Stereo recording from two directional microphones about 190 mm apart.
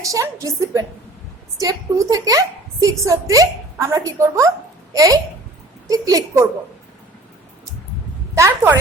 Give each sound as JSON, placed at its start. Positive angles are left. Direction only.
{"t": 0.0, "sound": "a woman's voice", "side_deg": -15}
{"t": 8.4, "sound": "a woman's voice", "side_deg": -15}